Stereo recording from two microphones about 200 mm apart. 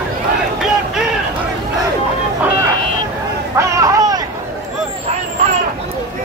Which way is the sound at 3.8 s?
15° right (ahead or behind).